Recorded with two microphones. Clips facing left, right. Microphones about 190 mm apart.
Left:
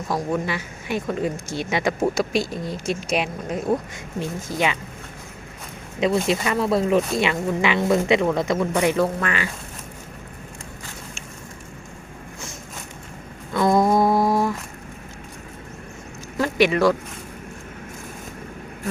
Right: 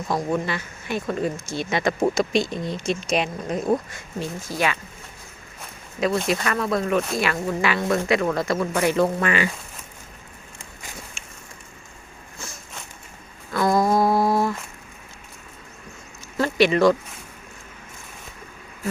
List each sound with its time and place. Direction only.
0.1 s speech: 10° left (ahead or behind)
3.9 s speech: 20° left (ahead or behind)
6.2 s speech: 20° left (ahead or behind)
9.0 s speech: 5° right (ahead or behind)
13.5 s a sound: 20° left (ahead or behind)
16.4 s a sound: 10° left (ahead or behind)